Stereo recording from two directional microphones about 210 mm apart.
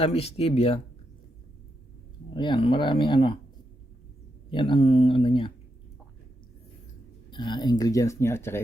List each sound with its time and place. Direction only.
0.0 s speech: 30° left (ahead or behind)
2.3 s speech: 25° left (ahead or behind)
4.5 s speech: 25° left (ahead or behind)
7.3 s speech: 20° left (ahead or behind)